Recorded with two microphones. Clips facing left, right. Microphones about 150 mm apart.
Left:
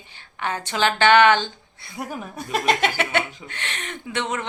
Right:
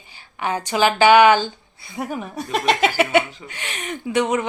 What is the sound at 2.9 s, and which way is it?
Speech, 10° right (ahead or behind).